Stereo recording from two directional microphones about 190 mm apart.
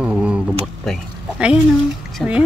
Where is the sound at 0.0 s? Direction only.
5° right (ahead or behind).